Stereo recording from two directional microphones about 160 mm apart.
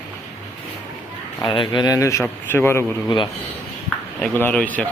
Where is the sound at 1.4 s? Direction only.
30° left (ahead or behind); by 2.8 s 15° left (ahead or behind).